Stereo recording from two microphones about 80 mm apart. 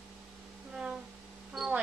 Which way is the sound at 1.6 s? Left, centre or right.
Centre.